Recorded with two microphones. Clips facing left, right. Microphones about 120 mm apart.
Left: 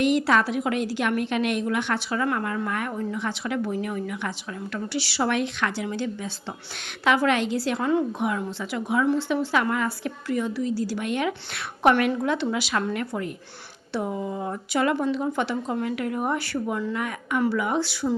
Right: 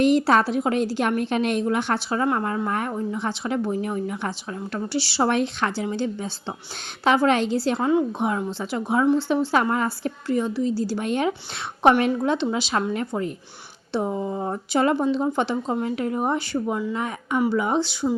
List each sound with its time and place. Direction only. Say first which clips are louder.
0.0 s a woman's voice: right 3 dB; 35° right (ahead or behind)
7.9 s speech: right 1 dB; 20° right (ahead or behind)
8.3 s a woman's voice: right 3 dB; 30° right (ahead or behind)